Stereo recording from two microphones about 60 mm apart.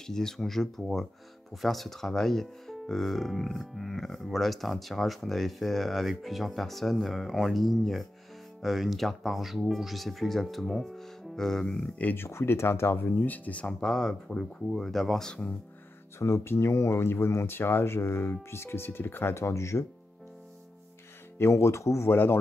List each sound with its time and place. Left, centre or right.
0.0 s speech: centre
12.0 s speech: left
12.3 s speech: left
13.7 s speech: centre
16.2 s speech: left
21.4 s speech: left
22.1 s speech: left